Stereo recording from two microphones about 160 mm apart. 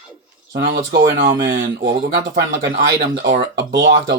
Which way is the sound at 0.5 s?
75° right (ahead or behind).